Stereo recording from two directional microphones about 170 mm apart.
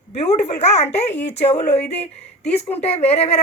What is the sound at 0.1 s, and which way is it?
A woman's voice, 40° left (ahead or behind).